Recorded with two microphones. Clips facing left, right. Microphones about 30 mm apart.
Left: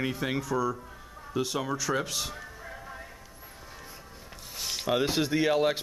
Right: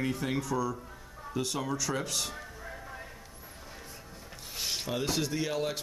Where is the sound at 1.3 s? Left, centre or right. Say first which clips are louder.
Left 3 dB; centre.